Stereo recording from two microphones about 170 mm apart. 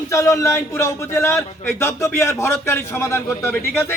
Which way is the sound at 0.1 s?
15° left (ahead or behind).